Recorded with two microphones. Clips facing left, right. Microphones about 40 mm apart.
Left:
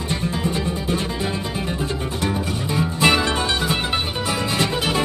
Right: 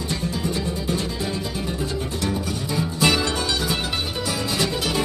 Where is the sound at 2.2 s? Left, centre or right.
Left.